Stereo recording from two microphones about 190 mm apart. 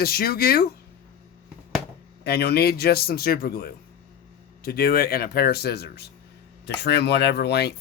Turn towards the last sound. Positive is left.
turn(degrees=60)  # may be behind; listen again after turning